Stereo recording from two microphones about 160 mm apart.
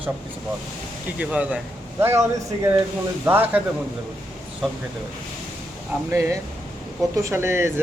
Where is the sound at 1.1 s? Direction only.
10° right (ahead or behind).